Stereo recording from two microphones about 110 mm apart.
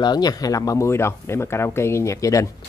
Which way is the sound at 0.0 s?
40° left (ahead or behind).